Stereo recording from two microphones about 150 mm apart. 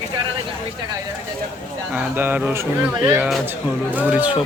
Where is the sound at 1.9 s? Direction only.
10° right (ahead or behind).